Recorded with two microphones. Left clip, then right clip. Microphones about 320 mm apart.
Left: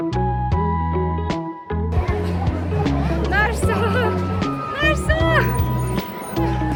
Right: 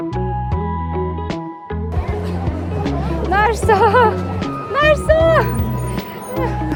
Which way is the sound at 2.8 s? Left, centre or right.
Centre.